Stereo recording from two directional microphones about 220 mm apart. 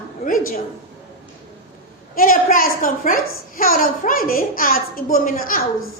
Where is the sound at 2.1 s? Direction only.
40° left (ahead or behind).